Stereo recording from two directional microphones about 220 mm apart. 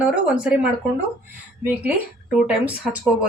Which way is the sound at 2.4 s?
5° right (ahead or behind).